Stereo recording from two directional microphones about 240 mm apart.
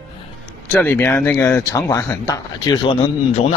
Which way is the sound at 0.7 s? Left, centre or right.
Centre.